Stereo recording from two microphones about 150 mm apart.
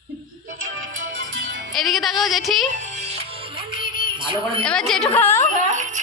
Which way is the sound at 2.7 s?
50° right (ahead or behind).